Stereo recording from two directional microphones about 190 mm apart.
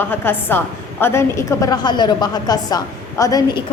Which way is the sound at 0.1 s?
10° left (ahead or behind).